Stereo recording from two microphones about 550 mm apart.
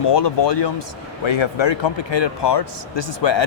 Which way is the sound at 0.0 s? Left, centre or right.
Left.